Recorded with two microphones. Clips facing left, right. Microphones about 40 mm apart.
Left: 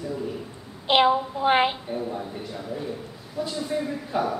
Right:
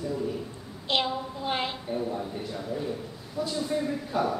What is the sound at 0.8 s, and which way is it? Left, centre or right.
Speech, left.